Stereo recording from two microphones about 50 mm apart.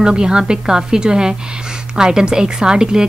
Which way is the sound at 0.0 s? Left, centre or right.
Centre.